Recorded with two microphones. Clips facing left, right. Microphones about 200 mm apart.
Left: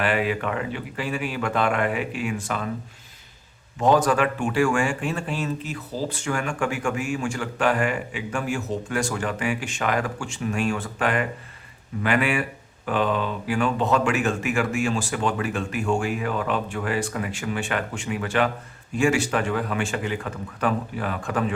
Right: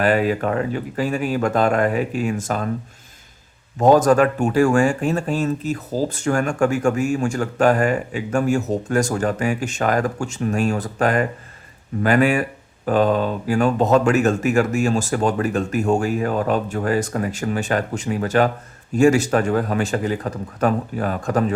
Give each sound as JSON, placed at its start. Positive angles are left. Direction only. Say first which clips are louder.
{"t": 0.0, "sound": "speech", "louder": "right 5 dB", "side_deg": -40}
{"t": 3.8, "sound": "speech", "louder": "right 6 dB", "side_deg": -45}